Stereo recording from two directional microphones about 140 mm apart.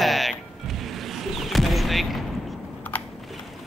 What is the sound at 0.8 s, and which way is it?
Vehicle, centre (ahead or behind).